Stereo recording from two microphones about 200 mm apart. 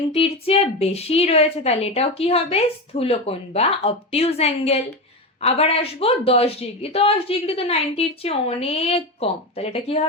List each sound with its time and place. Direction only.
0.1 s speech: 30° left (ahead or behind)